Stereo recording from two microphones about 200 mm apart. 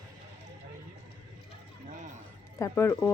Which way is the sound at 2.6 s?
15° left (ahead or behind).